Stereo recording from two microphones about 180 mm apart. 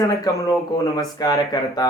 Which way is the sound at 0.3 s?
15° left (ahead or behind).